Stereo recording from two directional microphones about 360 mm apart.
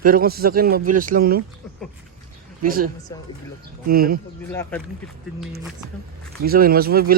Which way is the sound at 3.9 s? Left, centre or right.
Right.